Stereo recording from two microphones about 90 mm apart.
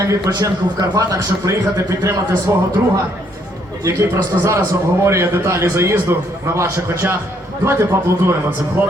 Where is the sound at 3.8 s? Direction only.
30° right (ahead or behind).